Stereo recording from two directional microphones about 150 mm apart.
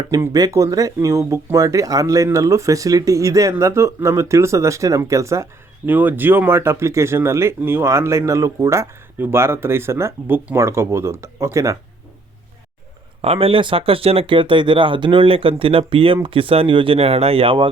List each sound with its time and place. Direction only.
0.1 s speech: 25° right (ahead or behind)
13.2 s speech: 40° right (ahead or behind)